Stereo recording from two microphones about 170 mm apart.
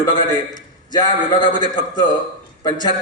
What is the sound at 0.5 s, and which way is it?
A man's voice, 25° left (ahead or behind).